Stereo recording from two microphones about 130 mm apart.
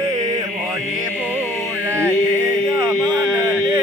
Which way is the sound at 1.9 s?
20° right (ahead or behind).